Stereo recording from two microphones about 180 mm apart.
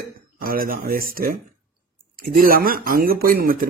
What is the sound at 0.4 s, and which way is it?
Speech, 55° right (ahead or behind).